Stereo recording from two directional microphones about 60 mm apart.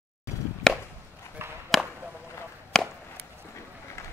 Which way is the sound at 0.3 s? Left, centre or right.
Left.